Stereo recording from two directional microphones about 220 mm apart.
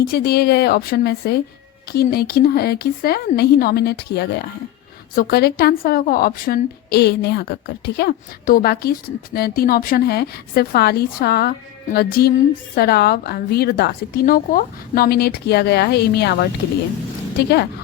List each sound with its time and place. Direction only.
0.0 s a woman's voice: 45° left (ahead or behind)